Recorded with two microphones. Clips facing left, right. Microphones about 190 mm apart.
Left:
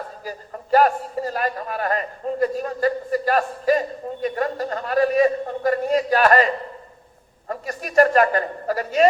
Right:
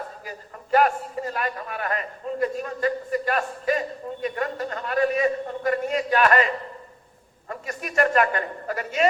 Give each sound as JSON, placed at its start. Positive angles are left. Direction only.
{"t": 0.3, "sound": "a man's voice", "side_deg": 35}